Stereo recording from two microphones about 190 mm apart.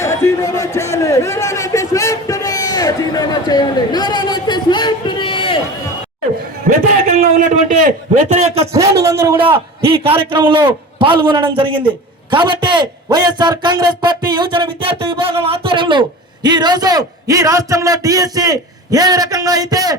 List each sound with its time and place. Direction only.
0.0 s a man's voice: 15° left (ahead or behind)
7.2 s a sound: 40° right (ahead or behind)
8.6 s speech: 15° right (ahead or behind)
9.8 s a man's voice: 30° right (ahead or behind)